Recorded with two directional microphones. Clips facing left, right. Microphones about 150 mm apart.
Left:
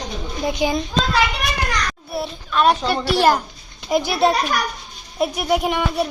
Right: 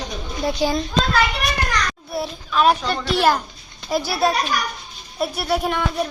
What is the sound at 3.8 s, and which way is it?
A child's voice, 20° left (ahead or behind).